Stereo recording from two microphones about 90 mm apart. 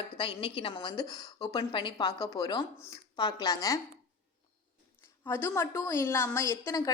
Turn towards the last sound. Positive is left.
turn(degrees=35)  # may be behind; listen again after turning